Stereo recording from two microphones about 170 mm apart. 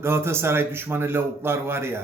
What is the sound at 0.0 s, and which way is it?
A man's voice, 15° right (ahead or behind).